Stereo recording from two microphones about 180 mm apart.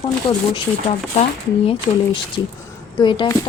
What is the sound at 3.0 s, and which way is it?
Speech, 25° left (ahead or behind).